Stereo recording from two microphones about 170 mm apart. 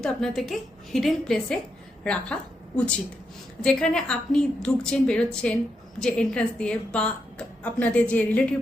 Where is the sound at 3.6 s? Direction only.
5° left (ahead or behind).